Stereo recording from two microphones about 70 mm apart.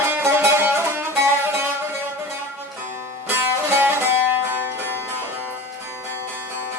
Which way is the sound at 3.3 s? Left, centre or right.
Right.